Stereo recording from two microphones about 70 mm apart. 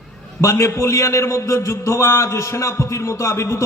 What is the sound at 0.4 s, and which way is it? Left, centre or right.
A man's voice, left.